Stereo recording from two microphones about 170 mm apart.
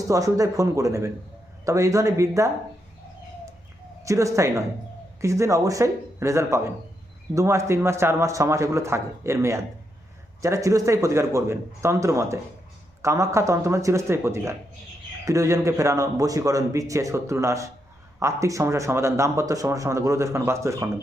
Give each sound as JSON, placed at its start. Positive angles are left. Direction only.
{"t": 0.1, "sound": "a man's voice", "side_deg": -20}
{"t": 4.0, "sound": "a man's voice", "side_deg": -20}